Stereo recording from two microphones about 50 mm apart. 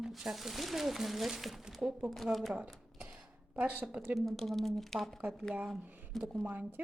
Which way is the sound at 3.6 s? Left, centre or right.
Right.